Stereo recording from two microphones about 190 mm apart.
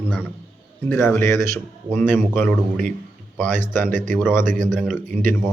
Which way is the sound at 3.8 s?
45° right (ahead or behind).